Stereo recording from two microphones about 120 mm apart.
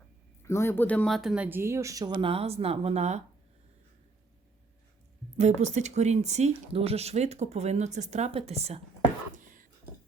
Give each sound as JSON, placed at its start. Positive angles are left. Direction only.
{"t": 0.4, "sound": "speech", "side_deg": 20}
{"t": 1.1, "sound": "speech", "side_deg": -5}
{"t": 1.5, "sound": "speech", "side_deg": -20}
{"t": 2.2, "sound": "speech", "side_deg": -55}
{"t": 5.4, "sound": "speech", "side_deg": -70}